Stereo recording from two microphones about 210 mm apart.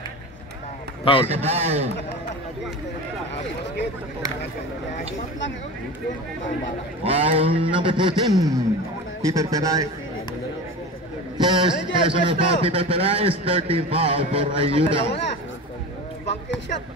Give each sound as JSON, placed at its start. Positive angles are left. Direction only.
{"t": 1.2, "sound": "a man's voice", "side_deg": -30}
{"t": 7.0, "sound": "a man's voice", "side_deg": -30}
{"t": 11.3, "sound": "a man's voice", "side_deg": -20}